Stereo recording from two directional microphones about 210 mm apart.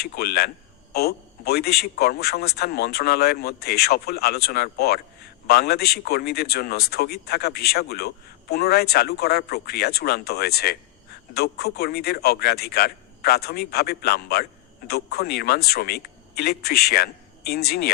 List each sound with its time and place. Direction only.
0.0 s a man's voice: 50° left (ahead or behind)